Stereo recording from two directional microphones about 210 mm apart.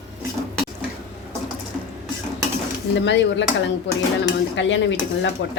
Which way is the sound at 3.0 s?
60° left (ahead or behind).